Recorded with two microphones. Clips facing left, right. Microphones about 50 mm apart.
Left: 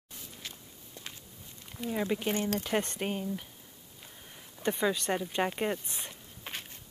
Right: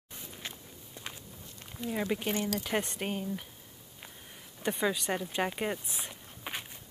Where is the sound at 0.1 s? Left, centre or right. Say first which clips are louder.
Right 2 dB; right.